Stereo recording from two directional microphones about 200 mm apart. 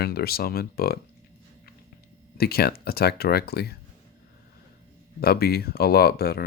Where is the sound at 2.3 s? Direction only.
50° left (ahead or behind).